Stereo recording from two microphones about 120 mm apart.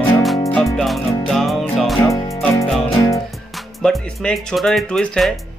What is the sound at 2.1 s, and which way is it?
Music, 25° left (ahead or behind).